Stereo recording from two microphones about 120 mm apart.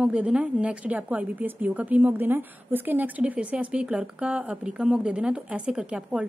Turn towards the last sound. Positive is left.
turn(degrees=-10)  # may be behind; listen again after turning